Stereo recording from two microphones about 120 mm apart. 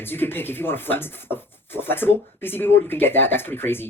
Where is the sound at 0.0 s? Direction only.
15° left (ahead or behind).